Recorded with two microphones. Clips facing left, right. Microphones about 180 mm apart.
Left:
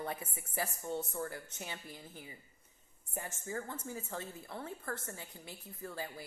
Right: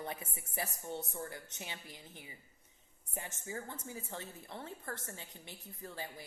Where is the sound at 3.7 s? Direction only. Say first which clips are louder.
Left 3 dB; 20° right (ahead or behind).